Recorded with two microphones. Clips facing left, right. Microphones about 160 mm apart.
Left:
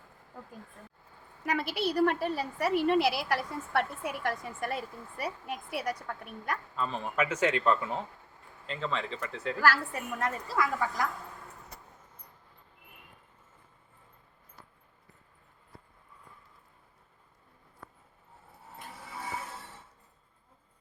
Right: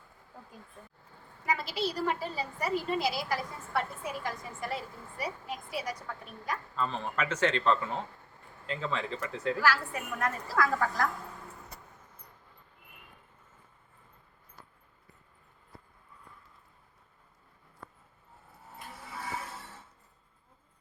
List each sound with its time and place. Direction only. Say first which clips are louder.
1.5 s a woman's voice: left 2 dB; 60° left (ahead or behind)
6.7 s a man's voice: left 1 dB; 5° left (ahead or behind)
8.6 s speech: even; centre (ahead or behind)
9.6 s a woman's voice: left 4 dB; 50° left (ahead or behind)
10.2 s speech: right 1 dB; 20° left (ahead or behind)